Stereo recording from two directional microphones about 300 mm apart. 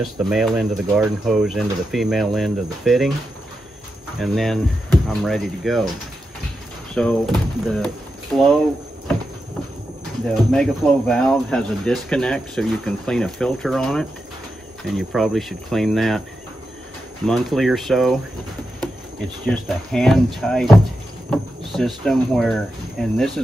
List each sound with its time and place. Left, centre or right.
0.3 s speech: centre
4.2 s speech: centre
6.9 s speech: centre
10.3 s speech: centre
17.3 s speech: centre
19.4 s speech: centre